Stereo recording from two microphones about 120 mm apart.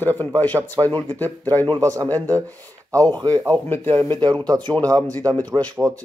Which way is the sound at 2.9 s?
30° right (ahead or behind).